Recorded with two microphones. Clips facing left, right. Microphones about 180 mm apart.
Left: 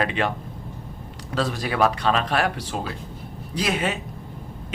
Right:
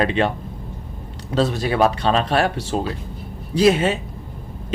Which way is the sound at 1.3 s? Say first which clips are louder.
Right 5 dB; 25° right (ahead or behind).